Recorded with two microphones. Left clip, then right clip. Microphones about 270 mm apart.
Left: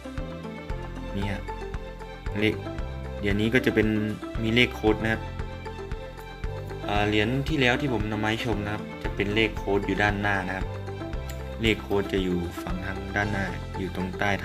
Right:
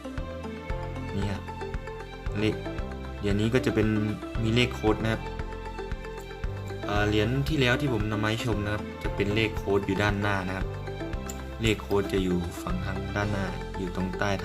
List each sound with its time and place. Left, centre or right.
3.2 s speech: centre
6.8 s speech: centre
11.6 s speech: centre
13.9 s speech: centre